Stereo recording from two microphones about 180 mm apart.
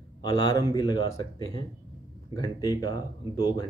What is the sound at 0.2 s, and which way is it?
Speech, 25° left (ahead or behind).